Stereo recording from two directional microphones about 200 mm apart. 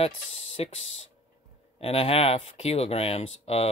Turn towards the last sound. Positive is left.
turn(degrees=30)  # may be behind; listen again after turning